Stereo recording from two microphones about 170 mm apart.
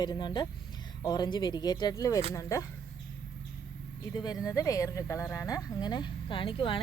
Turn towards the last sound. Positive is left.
turn(degrees=30)  # may be behind; listen again after turning